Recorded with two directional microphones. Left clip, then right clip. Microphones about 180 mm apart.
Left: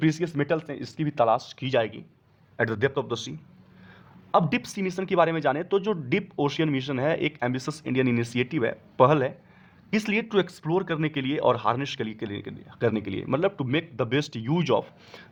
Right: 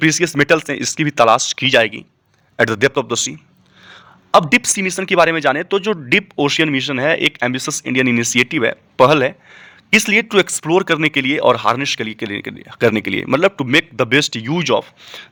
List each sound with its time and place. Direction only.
0.0 s speech: 20° right (ahead or behind)